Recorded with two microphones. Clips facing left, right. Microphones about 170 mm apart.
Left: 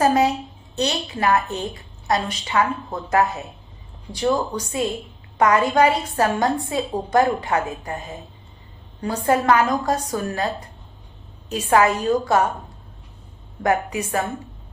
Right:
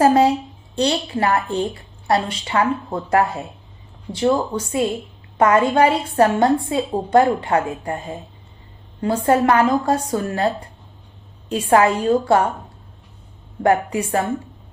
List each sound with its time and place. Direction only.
0.0 s a woman's voice: 30° right (ahead or behind)
9.0 s a woman's voice: 30° right (ahead or behind)
11.4 s a woman's voice: 30° right (ahead or behind)
13.6 s a woman's voice: 30° right (ahead or behind)